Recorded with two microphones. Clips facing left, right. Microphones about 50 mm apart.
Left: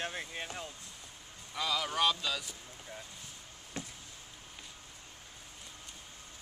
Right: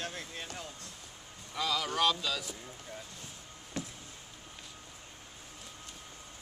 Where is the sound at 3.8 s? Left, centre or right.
Left.